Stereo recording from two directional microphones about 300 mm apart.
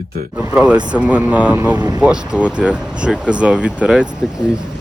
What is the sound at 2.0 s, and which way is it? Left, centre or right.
Speech, centre.